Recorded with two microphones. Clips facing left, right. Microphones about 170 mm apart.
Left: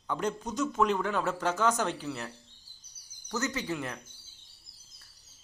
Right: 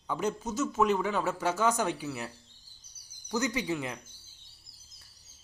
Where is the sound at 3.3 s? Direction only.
15° right (ahead or behind).